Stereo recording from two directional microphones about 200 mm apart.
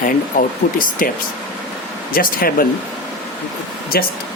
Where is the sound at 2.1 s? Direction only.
45° left (ahead or behind).